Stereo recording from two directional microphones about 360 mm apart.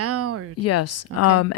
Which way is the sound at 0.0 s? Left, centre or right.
Right.